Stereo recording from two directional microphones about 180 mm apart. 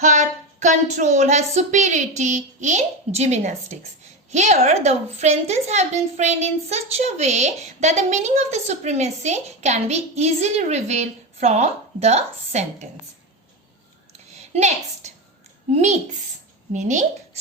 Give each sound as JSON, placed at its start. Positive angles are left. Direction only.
{"t": 0.0, "sound": "a woman's voice", "side_deg": -40}
{"t": 14.5, "sound": "a woman's voice", "side_deg": -40}